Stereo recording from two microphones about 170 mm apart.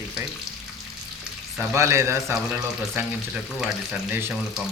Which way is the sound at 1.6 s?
15° right (ahead or behind).